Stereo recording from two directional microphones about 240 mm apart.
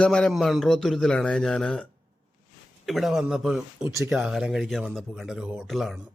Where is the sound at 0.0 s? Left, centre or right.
Centre.